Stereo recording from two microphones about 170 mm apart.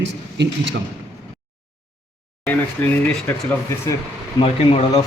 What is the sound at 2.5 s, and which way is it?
Speech, 10° left (ahead or behind).